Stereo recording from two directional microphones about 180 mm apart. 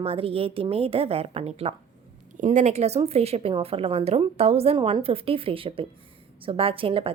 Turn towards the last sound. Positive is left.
turn(degrees=-30)  # may be behind; listen again after turning